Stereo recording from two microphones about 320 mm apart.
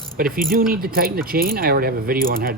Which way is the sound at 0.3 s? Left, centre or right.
Right.